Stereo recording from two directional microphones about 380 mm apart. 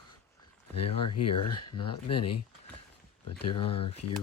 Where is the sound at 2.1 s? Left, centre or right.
Left.